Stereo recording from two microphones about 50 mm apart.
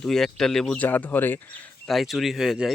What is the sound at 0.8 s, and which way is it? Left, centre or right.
Speech, left.